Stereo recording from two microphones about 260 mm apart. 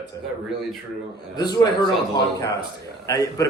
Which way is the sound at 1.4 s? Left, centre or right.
Centre.